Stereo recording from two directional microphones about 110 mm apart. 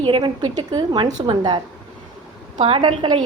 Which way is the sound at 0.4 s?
40° right (ahead or behind).